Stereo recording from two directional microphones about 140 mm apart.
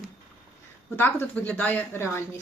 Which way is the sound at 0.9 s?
15° left (ahead or behind).